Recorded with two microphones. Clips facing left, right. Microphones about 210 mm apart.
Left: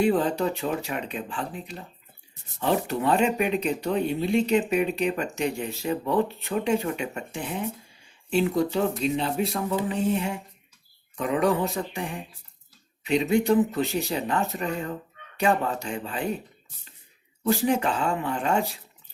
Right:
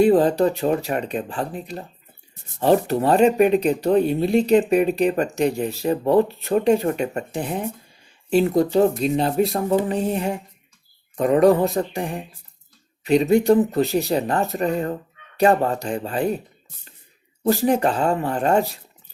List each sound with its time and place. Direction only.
0.0 s speech: 35° right (ahead or behind)
17.4 s speech: 40° right (ahead or behind)